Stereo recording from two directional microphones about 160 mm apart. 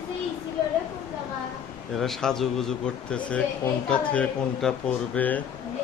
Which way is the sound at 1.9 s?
Centre (ahead or behind).